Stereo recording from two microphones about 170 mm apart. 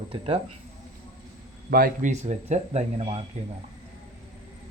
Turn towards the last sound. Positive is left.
turn(degrees=-40)  # may be behind; listen again after turning